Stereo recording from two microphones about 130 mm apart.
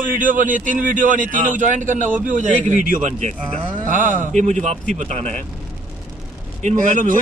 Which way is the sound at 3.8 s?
90° right.